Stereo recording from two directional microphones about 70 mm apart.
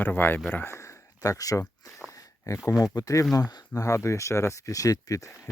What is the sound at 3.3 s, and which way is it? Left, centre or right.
Speech, left.